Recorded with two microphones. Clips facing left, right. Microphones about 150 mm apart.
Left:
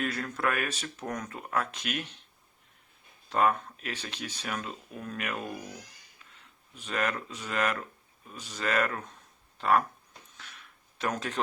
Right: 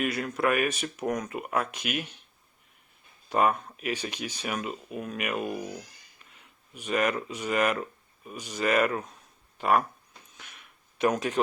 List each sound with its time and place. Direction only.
0.0 s speech: 10° right (ahead or behind)
3.2 s speech: 10° right (ahead or behind)
10.3 s a sound: 15° right (ahead or behind)